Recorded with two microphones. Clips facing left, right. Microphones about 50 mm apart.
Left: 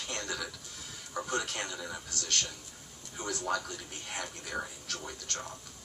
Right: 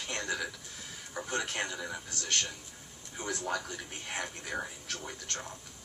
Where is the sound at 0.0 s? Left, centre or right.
Right.